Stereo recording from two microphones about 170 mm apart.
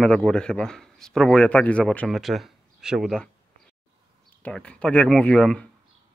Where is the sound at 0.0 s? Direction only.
5° left (ahead or behind).